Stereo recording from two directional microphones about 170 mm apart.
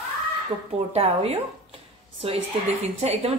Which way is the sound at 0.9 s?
35° right (ahead or behind).